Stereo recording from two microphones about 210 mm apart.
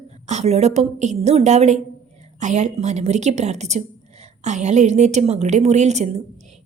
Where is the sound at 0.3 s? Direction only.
30° right (ahead or behind).